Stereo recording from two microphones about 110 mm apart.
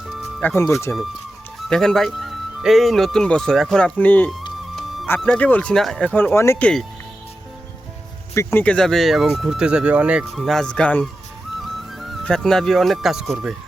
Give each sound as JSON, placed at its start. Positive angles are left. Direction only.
{"t": 0.0, "sound": "music", "side_deg": 0}
{"t": 0.6, "sound": "speech", "side_deg": 25}
{"t": 1.5, "sound": "speech", "side_deg": 5}
{"t": 4.7, "sound": "music", "side_deg": 0}
{"t": 5.0, "sound": "speech", "side_deg": 20}
{"t": 6.1, "sound": "speech", "side_deg": 15}
{"t": 6.6, "sound": "speech", "side_deg": 10}
{"t": 8.4, "sound": "speech", "side_deg": 25}
{"t": 8.6, "sound": "speech", "side_deg": 5}
{"t": 10.3, "sound": "speech", "side_deg": 0}
{"t": 11.6, "sound": "music", "side_deg": 0}
{"t": 12.2, "sound": "speech", "side_deg": 5}